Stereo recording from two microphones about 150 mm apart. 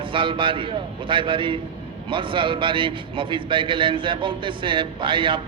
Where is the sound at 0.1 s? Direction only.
35° right (ahead or behind).